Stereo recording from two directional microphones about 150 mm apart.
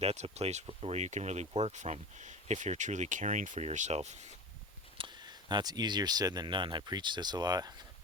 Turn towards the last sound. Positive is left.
turn(degrees=-25)  # may be behind; listen again after turning